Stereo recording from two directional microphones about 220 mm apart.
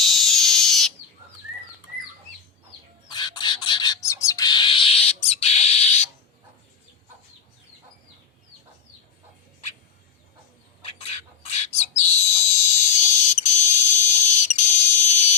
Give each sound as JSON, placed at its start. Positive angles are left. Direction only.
{"t": 0.0, "sound": "frog", "side_deg": 0}
{"t": 3.1, "sound": "bird", "side_deg": 20}
{"t": 10.8, "sound": "a sound", "side_deg": 25}
{"t": 11.5, "sound": "bird", "side_deg": 30}
{"t": 12.5, "sound": "fire alarm", "side_deg": 30}